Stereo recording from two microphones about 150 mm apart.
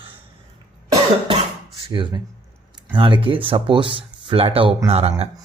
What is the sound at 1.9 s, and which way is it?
Speech, 30° right (ahead or behind).